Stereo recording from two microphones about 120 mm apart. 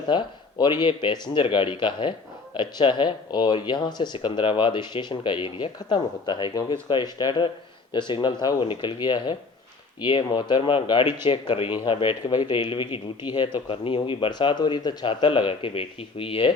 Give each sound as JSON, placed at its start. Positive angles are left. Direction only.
{"t": 0.1, "sound": "speech", "side_deg": 40}
{"t": 13.7, "sound": "speech", "side_deg": 45}